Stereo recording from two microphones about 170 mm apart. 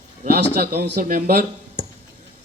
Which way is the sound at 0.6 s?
60° right (ahead or behind).